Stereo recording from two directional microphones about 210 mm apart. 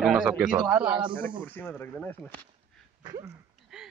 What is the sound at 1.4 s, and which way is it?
Speech, 5° left (ahead or behind).